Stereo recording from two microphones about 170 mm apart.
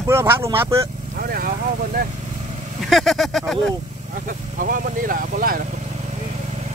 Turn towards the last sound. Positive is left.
turn(degrees=-55)  # may be behind; listen again after turning